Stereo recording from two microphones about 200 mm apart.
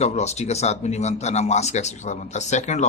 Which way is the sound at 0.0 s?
35° left (ahead or behind).